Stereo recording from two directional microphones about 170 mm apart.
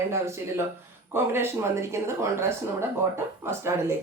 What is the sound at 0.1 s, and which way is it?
Speech, 15° right (ahead or behind).